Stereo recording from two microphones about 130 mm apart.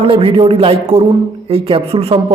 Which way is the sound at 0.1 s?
45° right (ahead or behind).